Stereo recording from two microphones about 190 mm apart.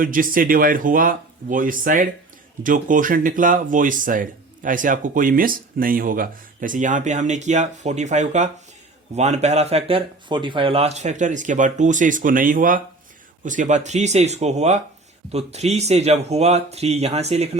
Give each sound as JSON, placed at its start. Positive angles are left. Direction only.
{"t": 0.0, "sound": "speech", "side_deg": -45}